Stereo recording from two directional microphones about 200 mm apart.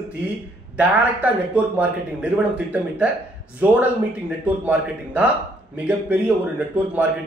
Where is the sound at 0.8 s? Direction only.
5° right (ahead or behind).